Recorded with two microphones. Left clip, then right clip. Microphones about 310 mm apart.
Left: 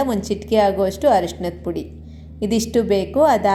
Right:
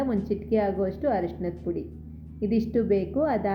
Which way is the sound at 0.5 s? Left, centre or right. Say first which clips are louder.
Left 10 dB; centre.